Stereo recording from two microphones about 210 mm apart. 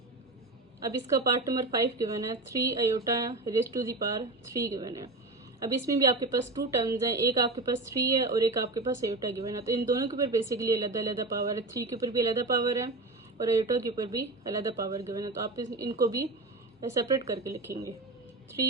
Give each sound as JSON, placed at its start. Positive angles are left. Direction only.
{"t": 0.9, "sound": "a woman's voice", "side_deg": -15}